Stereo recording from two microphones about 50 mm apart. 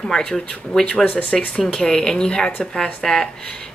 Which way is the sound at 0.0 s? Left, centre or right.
Centre.